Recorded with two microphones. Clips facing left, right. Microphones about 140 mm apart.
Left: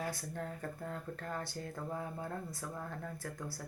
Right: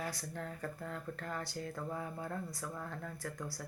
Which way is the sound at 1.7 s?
15° left (ahead or behind).